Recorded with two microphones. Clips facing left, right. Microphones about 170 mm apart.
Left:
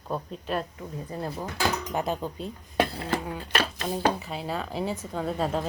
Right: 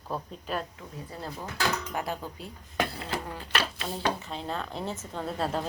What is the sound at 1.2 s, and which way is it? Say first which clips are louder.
Speech: left 3 dB; 20° left (ahead or behind).